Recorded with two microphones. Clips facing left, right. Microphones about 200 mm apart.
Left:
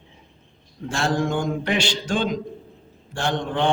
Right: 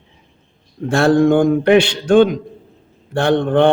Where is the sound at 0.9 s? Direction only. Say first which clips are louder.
Right 11 dB; 60° right (ahead or behind).